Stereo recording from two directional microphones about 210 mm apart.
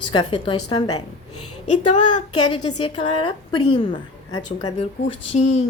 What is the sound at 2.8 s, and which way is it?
A woman's voice, 25° left (ahead or behind).